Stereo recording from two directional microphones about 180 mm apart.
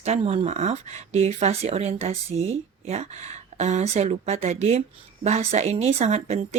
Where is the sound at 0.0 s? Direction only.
35° right (ahead or behind).